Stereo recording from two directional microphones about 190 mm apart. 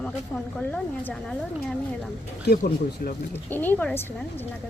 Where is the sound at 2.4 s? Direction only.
50° left (ahead or behind).